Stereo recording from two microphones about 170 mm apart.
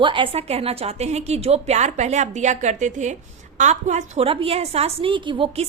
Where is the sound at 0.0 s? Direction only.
30° right (ahead or behind).